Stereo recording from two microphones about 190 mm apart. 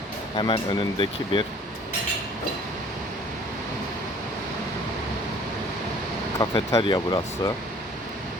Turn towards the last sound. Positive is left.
turn(degrees=20)  # may be behind; listen again after turning